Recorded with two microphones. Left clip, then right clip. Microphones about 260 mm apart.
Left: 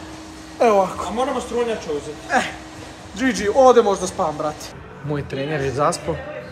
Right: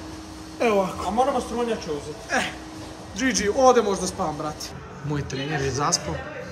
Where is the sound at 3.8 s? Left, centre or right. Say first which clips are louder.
Left 5 dB; centre.